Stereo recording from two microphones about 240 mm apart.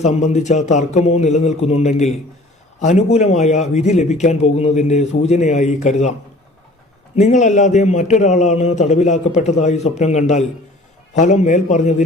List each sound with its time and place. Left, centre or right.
0.0 s a man's voice: left
7.2 s a man's voice: left